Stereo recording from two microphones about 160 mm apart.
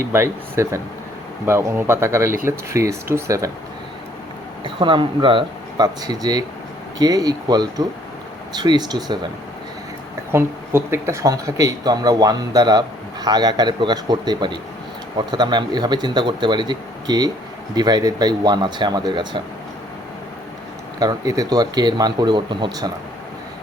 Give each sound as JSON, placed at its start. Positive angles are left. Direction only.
{"t": 0.1, "sound": "speech", "side_deg": -15}
{"t": 4.6, "sound": "speech", "side_deg": -30}
{"t": 10.3, "sound": "speech", "side_deg": -15}
{"t": 21.0, "sound": "speech", "side_deg": -25}